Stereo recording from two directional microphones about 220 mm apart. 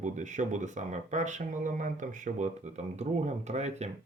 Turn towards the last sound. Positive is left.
turn(degrees=-30)  # may be behind; listen again after turning